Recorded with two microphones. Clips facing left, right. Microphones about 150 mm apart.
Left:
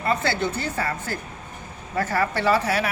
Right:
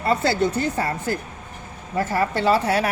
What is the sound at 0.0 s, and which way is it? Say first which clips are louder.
Speech: right 4 dB; 35° right (ahead or behind).